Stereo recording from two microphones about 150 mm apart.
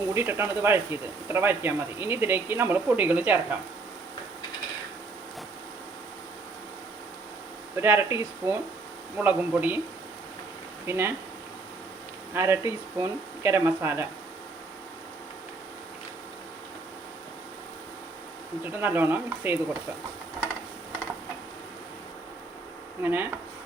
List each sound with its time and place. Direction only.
0.1 s speech: 15° right (ahead or behind)
7.8 s speech: 15° right (ahead or behind)
10.8 s speech: 15° right (ahead or behind)
12.3 s speech: 15° right (ahead or behind)
18.6 s speech: 15° right (ahead or behind)
23.0 s speech: 15° right (ahead or behind)